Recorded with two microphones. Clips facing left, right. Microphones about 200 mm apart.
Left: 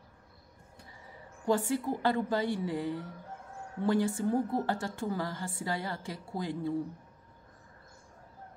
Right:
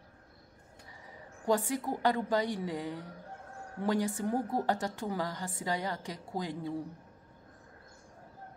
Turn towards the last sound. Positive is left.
turn(degrees=-15)  # may be behind; listen again after turning